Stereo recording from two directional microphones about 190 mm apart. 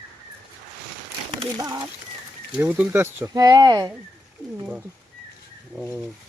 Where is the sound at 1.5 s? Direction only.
20° right (ahead or behind).